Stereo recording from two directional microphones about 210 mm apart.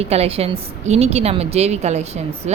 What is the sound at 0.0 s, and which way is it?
Speech, 30° right (ahead or behind).